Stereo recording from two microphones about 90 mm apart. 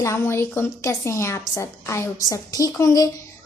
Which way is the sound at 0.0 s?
30° left (ahead or behind).